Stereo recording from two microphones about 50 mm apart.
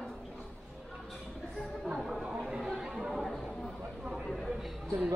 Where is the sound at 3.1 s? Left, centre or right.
Centre.